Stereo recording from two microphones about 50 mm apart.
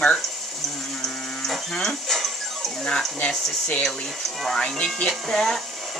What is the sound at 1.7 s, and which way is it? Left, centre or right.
Speech, centre.